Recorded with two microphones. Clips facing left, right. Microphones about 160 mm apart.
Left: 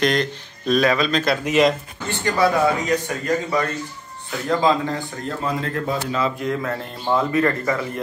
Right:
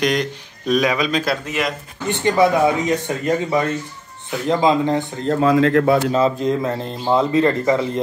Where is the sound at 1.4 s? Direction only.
20° left (ahead or behind).